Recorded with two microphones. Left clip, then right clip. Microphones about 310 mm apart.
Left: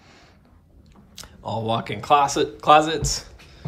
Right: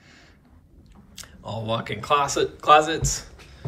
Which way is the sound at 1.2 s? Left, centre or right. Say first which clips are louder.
Left 5 dB; centre.